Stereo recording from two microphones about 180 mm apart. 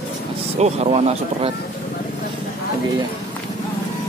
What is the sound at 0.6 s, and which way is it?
Speech, 35° right (ahead or behind).